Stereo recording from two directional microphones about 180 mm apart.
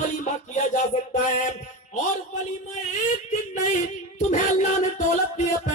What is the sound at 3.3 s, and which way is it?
Music, 40° left (ahead or behind).